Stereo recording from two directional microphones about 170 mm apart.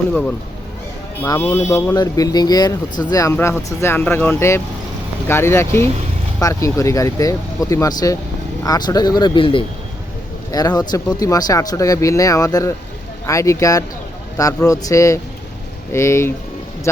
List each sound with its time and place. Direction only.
0.1 s speech: 5° left (ahead or behind)